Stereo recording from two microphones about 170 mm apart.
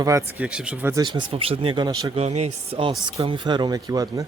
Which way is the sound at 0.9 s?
25° right (ahead or behind).